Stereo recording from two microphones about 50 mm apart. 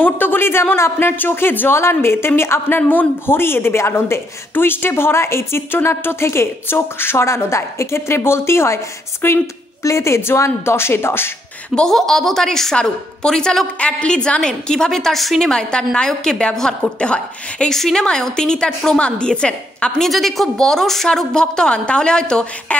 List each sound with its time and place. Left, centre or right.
0.0 s speech: left
1.1 s a woman's voice: left
2.9 s a woman's voice: left
9.2 s speech: left
9.8 s a woman's voice: left
11.9 s a woman's voice: centre
13.7 s a woman's voice: left
17.6 s a woman's voice: centre
20.0 s a woman's voice: centre
22.7 s a woman's voice: left